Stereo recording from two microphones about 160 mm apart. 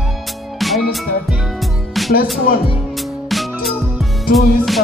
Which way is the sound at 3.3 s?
Centre (ahead or behind).